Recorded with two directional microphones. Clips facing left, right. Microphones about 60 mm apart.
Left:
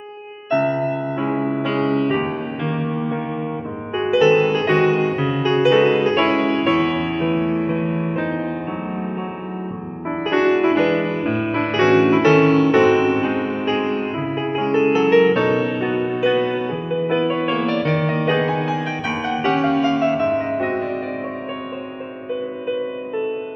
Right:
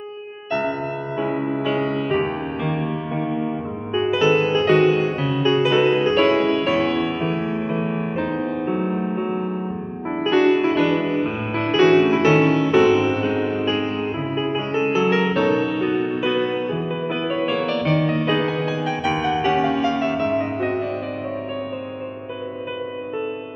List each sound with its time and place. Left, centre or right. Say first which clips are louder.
0.5 s music: left 5 dB; left
1.4 s music: left 2 dB; left
3.9 s music: left 3 dB; left
6.9 s music: left 2 dB; left
10.0 s music: even; left
14.3 s music: even; left
14.6 s music: left 6 dB; left
18.2 s music: left 2 dB; left
19.8 s music: left 3 dB; left